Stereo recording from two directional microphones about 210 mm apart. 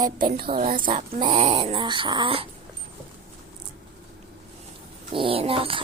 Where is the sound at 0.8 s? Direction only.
25° right (ahead or behind).